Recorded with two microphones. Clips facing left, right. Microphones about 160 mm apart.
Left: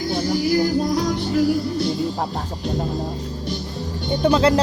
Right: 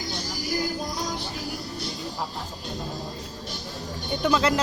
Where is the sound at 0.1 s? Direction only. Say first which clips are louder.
Left 12 dB; 60° left (ahead or behind).